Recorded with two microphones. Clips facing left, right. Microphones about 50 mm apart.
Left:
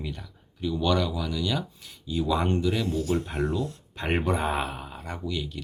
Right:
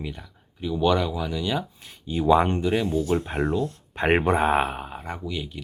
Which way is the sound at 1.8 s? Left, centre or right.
Right.